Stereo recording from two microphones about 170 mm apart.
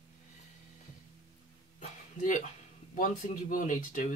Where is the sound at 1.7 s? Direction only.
50° left (ahead or behind).